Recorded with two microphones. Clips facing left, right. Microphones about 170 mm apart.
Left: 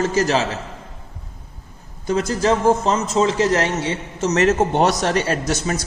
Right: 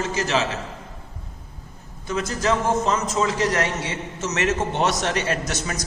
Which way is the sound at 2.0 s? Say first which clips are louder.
Left 5 dB; 35° left (ahead or behind).